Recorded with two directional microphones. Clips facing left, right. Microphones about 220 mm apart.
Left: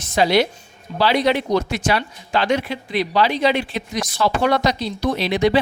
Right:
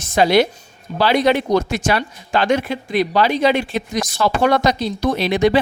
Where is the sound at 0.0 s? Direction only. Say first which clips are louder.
Right 3 dB; 50° right (ahead or behind).